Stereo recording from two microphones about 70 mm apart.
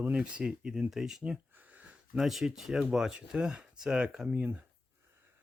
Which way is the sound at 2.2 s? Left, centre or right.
Centre.